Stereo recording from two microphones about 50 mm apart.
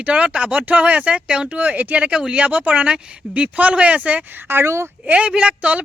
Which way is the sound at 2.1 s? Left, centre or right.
Centre.